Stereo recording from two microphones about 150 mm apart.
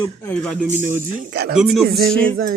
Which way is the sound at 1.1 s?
75° right (ahead or behind).